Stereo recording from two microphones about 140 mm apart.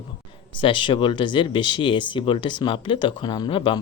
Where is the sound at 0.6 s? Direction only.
35° left (ahead or behind).